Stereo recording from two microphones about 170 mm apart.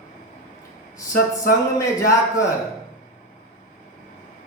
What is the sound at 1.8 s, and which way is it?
Speech, 20° left (ahead or behind).